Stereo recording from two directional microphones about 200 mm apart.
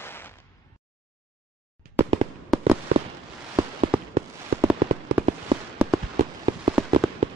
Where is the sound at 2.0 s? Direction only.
30° right (ahead or behind).